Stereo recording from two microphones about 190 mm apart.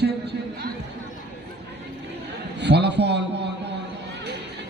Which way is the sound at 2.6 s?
65° right (ahead or behind).